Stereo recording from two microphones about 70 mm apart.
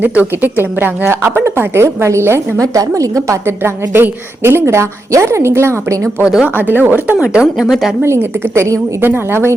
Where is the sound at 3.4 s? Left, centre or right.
Right.